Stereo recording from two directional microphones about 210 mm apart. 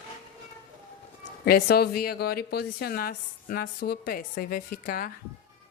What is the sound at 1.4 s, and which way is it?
A woman's voice, 45° left (ahead or behind).